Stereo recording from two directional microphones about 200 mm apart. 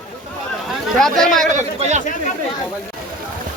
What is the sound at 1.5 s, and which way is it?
Speech, 35° right (ahead or behind).